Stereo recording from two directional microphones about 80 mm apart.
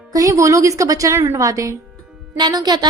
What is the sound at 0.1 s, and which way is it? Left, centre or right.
A woman's voice, right.